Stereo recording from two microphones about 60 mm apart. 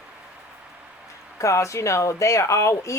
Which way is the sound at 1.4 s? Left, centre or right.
Left.